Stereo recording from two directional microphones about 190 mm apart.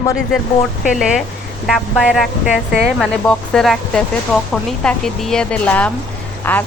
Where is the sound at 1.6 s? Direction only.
Centre (ahead or behind).